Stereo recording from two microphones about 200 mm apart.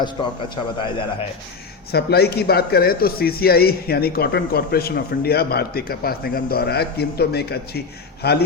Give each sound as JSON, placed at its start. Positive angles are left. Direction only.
{"t": 0.5, "sound": "a man's voice", "side_deg": 25}
{"t": 1.9, "sound": "speech", "side_deg": 55}